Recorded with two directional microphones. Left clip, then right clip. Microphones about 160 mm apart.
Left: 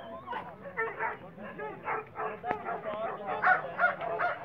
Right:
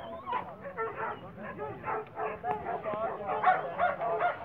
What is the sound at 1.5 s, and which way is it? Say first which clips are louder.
Bow-wow: even; 45° right (ahead or behind).